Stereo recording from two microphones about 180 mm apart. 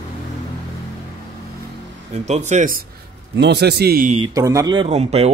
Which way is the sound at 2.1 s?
40° right (ahead or behind).